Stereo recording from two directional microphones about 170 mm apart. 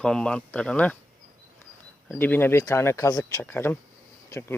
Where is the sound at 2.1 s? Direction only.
10° left (ahead or behind).